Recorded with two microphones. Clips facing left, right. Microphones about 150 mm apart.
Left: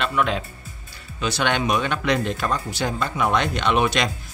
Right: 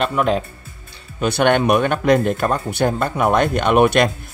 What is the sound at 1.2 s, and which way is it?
Speech, 55° right (ahead or behind).